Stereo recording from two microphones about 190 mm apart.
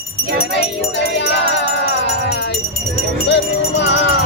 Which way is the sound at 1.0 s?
65° left (ahead or behind).